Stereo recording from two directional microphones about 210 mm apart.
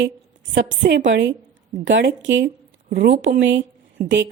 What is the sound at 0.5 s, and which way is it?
A woman's voice, 55° right (ahead or behind).